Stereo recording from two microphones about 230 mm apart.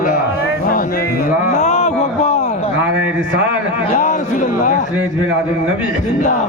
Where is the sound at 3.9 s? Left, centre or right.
Left.